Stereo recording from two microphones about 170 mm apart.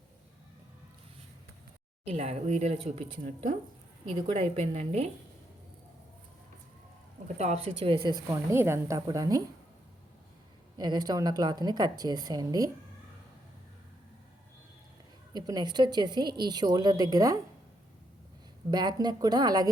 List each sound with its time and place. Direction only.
2.0 s speech: 40° right (ahead or behind)
7.3 s speech: 40° right (ahead or behind)
8.3 s a woman's voice: 15° right (ahead or behind)
10.8 s a woman's voice: 25° right (ahead or behind)
15.3 s a woman's voice: 25° right (ahead or behind)
18.7 s a woman's voice: 25° right (ahead or behind)